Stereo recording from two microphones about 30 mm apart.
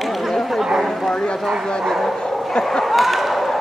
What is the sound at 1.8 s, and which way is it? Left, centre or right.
Speech, centre.